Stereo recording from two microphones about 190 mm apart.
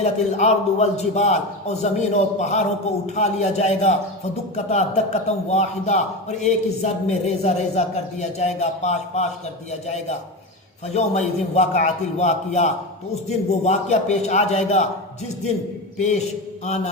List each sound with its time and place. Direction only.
0.0 s a man's voice: 35° left (ahead or behind)
16.0 s a man's voice: 35° left (ahead or behind)